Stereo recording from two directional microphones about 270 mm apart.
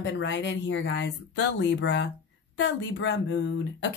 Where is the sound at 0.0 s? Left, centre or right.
Left.